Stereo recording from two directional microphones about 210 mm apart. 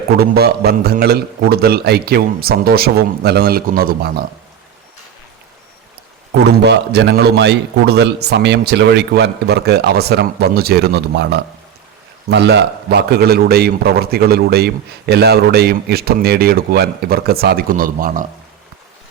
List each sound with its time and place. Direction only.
0.2 s a man's voice: 50° right (ahead or behind)
6.4 s a man's voice: 55° right (ahead or behind)